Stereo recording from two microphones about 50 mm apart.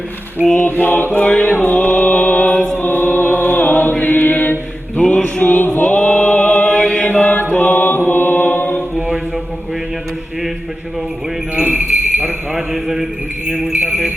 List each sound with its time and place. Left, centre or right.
0.6 s mantra: left
1.6 s music: left
2.7 s chant: left
5.0 s music: left
5.4 s music: left; by 7.1 s centre
7.1 s chant: left
7.5 s mantra: left
7.9 s mantra: left
9.0 s mantra: centre
11.9 s jingle bell: right
12.5 s mantra: centre